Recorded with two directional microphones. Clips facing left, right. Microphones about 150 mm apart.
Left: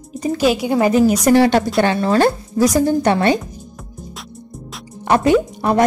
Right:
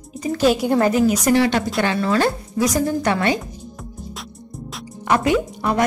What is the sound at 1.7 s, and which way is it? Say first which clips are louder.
A woman's voice: left 4 dB; 35° left (ahead or behind).